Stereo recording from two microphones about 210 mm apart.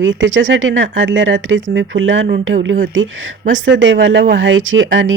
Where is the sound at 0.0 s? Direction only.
60° right (ahead or behind).